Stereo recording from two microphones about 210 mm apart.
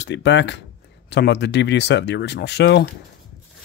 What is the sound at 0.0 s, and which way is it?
Speech, 55° left (ahead or behind).